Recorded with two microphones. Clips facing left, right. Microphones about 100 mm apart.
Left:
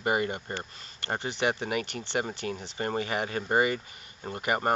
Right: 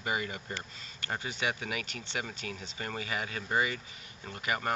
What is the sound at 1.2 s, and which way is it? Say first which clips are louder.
Speech: left 7 dB; 65° left (ahead or behind).